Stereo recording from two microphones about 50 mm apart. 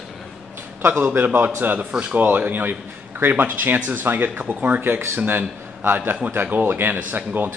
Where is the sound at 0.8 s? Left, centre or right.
Right.